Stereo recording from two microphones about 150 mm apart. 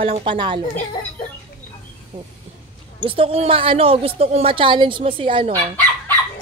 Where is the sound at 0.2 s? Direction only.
35° right (ahead or behind).